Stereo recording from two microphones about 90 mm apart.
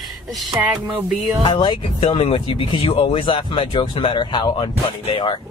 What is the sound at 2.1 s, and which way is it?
Speech, 90° left.